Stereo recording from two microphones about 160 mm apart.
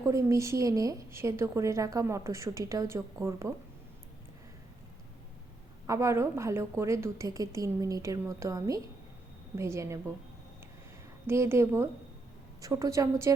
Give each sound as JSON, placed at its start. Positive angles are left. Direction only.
{"t": 0.0, "sound": "a woman's voice", "side_deg": -20}
{"t": 5.8, "sound": "a woman's voice", "side_deg": -20}
{"t": 11.3, "sound": "a woman's voice", "side_deg": -15}